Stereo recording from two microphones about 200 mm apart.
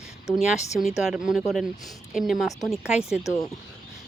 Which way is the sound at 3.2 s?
15° left (ahead or behind).